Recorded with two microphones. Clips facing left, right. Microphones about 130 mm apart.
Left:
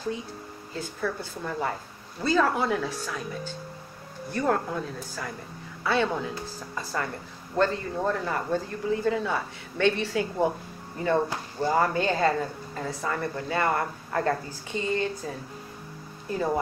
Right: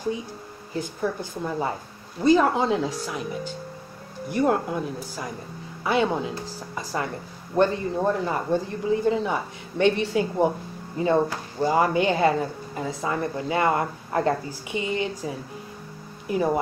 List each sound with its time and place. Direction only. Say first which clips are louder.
0.7 s a woman's voice: right 4 dB; 20° right (ahead or behind)